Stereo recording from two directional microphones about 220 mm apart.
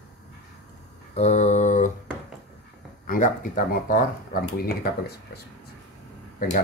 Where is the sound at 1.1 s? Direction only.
30° left (ahead or behind).